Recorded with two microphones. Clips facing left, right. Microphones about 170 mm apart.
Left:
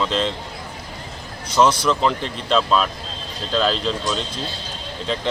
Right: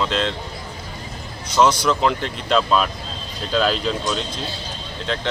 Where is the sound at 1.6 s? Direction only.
30° left (ahead or behind).